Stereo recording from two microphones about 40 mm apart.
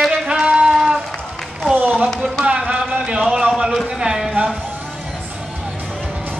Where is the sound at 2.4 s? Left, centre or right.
Right.